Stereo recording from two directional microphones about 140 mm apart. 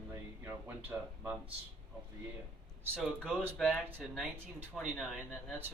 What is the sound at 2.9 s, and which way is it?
Speech, 10° right (ahead or behind).